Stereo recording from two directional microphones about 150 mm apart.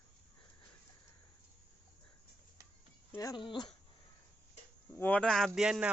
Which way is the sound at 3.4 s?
35° left (ahead or behind).